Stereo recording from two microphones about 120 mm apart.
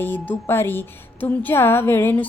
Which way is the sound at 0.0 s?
15° left (ahead or behind).